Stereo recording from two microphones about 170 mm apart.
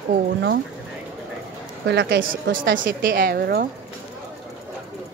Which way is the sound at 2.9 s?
65° right (ahead or behind).